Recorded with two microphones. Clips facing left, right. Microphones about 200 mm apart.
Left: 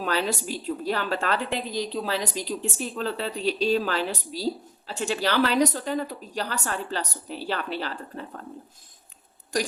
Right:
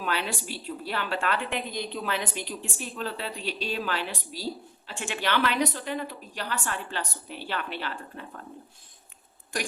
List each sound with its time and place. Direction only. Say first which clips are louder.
0.0 s a woman's voice: left 4 dB; 40° left (ahead or behind)